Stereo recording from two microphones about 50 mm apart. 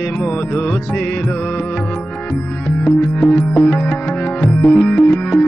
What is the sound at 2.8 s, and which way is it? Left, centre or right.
Music, left.